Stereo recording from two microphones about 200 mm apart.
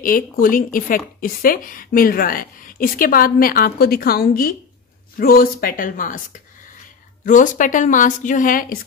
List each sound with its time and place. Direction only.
0.0 s speech: 45° left (ahead or behind)
7.2 s a woman's voice: 40° left (ahead or behind)